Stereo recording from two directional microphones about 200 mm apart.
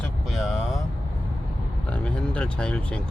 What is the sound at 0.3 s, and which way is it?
Vehicle, centre (ahead or behind).